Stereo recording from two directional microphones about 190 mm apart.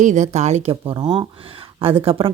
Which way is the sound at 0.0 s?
40° right (ahead or behind).